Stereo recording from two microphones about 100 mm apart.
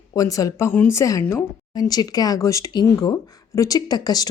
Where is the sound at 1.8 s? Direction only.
40° left (ahead or behind).